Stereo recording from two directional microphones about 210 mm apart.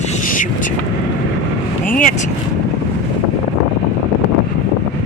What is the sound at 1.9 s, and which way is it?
Vehicle, 40° left (ahead or behind).